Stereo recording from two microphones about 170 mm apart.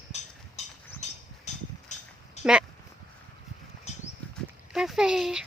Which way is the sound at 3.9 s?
40° left (ahead or behind).